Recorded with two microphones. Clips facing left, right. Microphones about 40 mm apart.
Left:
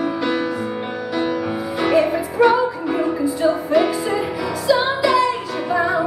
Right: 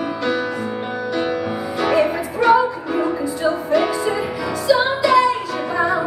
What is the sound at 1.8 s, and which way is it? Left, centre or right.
Music, centre.